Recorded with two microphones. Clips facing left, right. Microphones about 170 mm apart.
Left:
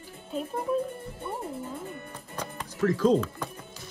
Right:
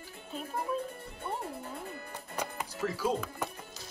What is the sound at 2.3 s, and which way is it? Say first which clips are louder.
Music: even; 10° right (ahead or behind).